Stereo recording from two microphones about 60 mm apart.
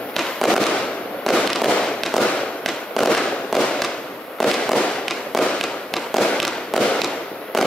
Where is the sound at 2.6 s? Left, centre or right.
Centre.